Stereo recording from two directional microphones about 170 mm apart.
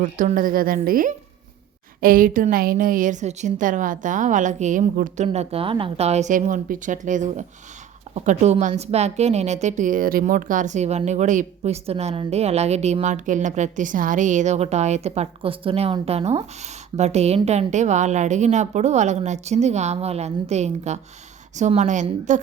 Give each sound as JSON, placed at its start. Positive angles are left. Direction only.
{"t": 0.0, "sound": "a woman's voice", "side_deg": -45}